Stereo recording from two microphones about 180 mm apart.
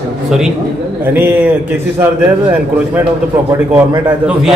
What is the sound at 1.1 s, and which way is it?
Speech, 10° right (ahead or behind).